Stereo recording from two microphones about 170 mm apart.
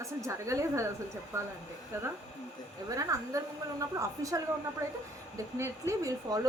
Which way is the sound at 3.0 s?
20° right (ahead or behind).